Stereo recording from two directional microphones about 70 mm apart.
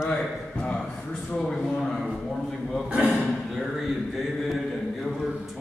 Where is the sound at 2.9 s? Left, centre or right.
Centre.